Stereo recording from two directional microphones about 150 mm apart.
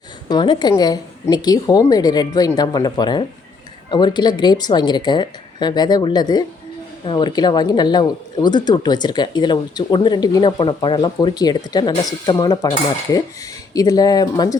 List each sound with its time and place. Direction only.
0.3 s speech: 30° left (ahead or behind)
13.7 s speech: 25° left (ahead or behind)